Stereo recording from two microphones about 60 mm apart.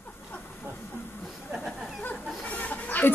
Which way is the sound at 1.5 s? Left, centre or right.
Centre.